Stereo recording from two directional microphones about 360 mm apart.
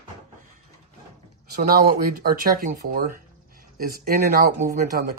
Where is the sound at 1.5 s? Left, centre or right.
Right.